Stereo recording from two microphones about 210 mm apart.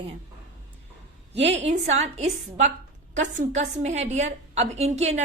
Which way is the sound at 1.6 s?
30° right (ahead or behind).